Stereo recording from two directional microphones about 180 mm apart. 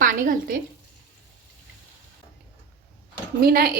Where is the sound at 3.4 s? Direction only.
60° right (ahead or behind).